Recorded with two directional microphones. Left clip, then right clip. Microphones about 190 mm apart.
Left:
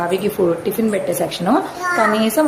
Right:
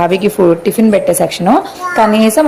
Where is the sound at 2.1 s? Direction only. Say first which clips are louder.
Right 7 dB; 35° right (ahead or behind).